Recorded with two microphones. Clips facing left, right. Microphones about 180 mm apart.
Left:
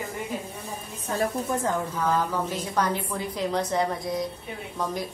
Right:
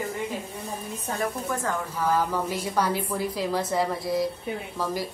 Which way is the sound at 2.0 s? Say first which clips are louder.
Right 4 dB; 10° right (ahead or behind).